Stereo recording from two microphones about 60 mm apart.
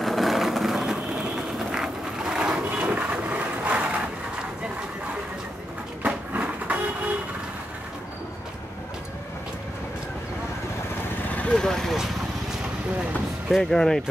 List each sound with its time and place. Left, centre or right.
0.0 s vehicle: centre
2.8 s a sound: right
6.3 s vehicle: right
11.5 s vehicle: centre
13.6 s speech: centre